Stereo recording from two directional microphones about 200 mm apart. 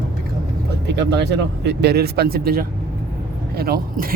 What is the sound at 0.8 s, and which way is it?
Speech, 55° right (ahead or behind).